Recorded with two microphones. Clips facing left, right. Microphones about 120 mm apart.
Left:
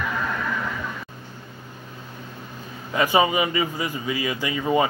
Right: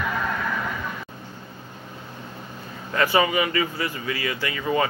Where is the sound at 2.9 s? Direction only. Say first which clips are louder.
Left 1 dB; 15° left (ahead or behind).